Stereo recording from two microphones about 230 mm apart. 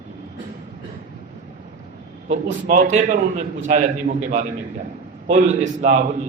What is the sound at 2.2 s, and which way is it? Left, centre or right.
A man's voice, right.